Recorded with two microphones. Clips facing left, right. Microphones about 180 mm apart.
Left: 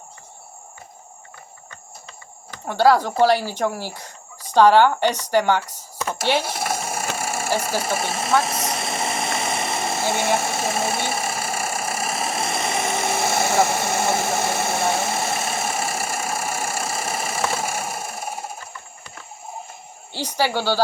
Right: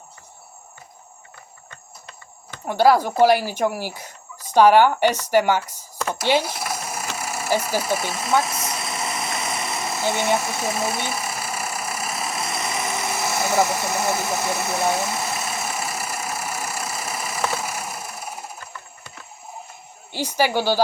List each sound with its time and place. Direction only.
2.6 s speech: 10° right (ahead or behind)
6.6 s sewing machine: 25° left (ahead or behind)
7.2 s a sound: 25° left (ahead or behind)
7.8 s speech: 25° left (ahead or behind)
8.1 s vehicle: 25° left (ahead or behind)
10.1 s speech: 25° left (ahead or behind)
11.1 s engine: 25° left (ahead or behind)
20.1 s speech: 10° right (ahead or behind)